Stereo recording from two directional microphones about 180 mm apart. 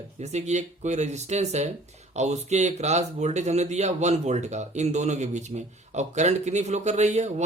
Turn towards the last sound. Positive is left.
turn(degrees=-40)  # may be behind; listen again after turning